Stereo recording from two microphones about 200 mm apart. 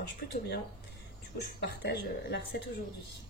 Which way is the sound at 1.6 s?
60° left (ahead or behind).